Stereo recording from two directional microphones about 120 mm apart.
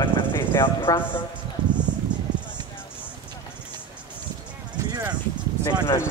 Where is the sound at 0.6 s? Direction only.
40° left (ahead or behind).